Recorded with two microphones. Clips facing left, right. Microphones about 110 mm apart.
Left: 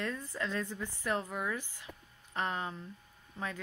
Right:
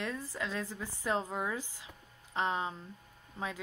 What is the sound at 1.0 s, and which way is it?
Speech, 20° right (ahead or behind).